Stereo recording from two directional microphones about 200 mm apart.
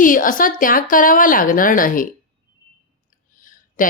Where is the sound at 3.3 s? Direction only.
40° left (ahead or behind).